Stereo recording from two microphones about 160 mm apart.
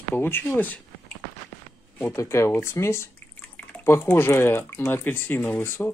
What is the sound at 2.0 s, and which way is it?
Speech, 15° left (ahead or behind).